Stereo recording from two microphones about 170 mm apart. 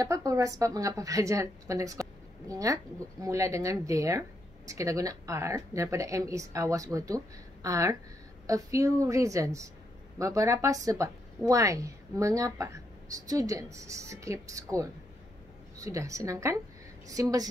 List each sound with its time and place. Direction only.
0.0 s speech: 20° right (ahead or behind)